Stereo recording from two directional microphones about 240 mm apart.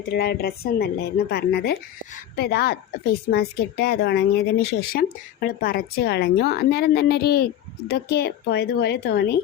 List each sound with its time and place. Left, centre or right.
0.1 s a woman's voice: left